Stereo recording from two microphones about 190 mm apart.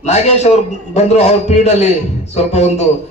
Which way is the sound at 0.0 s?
35° left (ahead or behind).